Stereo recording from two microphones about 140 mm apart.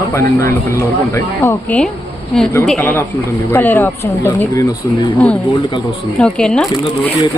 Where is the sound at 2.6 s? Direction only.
5° left (ahead or behind).